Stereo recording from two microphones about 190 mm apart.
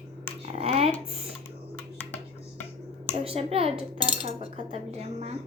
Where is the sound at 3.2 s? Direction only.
30° right (ahead or behind).